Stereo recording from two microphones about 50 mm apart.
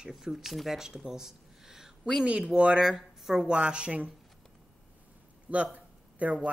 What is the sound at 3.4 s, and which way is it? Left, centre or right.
Speech, centre.